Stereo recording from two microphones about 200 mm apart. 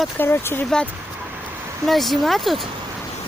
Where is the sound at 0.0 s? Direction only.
10° left (ahead or behind).